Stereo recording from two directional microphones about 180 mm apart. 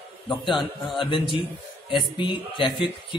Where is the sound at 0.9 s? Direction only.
25° left (ahead or behind).